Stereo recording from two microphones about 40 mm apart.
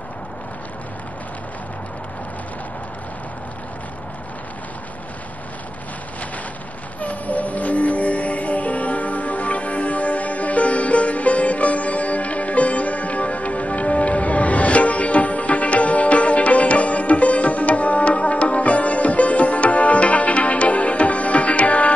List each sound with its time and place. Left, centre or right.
7.0 s music: left